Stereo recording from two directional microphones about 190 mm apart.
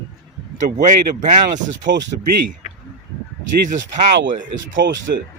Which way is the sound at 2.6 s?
40° left (ahead or behind).